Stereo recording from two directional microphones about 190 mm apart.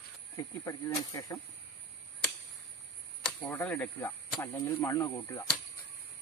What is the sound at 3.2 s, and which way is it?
Speech, 5° left (ahead or behind).